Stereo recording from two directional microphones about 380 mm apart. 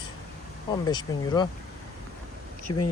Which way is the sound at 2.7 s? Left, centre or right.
Left.